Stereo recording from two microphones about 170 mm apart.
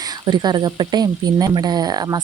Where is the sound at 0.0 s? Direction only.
25° right (ahead or behind).